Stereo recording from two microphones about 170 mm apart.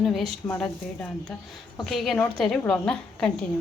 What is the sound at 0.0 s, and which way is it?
A woman's voice, centre (ahead or behind).